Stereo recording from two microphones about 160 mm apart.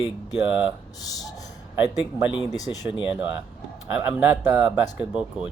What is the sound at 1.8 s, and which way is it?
Speech, 10° right (ahead or behind).